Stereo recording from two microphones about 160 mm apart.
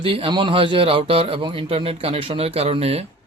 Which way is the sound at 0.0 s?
35° right (ahead or behind).